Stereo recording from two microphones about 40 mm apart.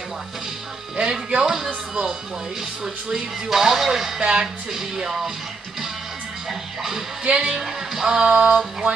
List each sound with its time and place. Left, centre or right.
0.9 s music: centre
2.8 s speech: centre
4.2 s speech: right
7.2 s speech: right